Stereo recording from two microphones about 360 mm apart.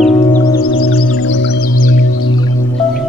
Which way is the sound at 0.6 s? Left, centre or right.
Left.